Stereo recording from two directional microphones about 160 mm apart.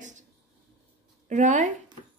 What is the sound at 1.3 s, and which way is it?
Speech, 50° right (ahead or behind).